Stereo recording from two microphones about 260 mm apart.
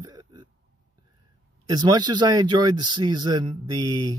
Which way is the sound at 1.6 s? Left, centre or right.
Centre.